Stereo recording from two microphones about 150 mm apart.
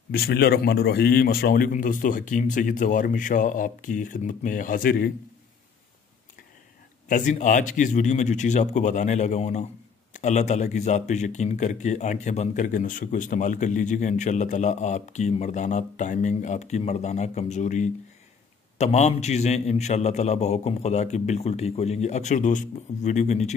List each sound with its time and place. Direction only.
0.1 s a man's voice: 90° left
7.1 s speech: 60° left (ahead or behind)